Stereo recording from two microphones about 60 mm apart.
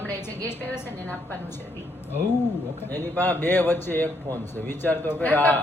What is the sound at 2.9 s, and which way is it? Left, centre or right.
A woman's voice, left.